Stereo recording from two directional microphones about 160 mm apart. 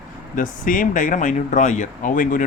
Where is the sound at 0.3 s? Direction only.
55° left (ahead or behind).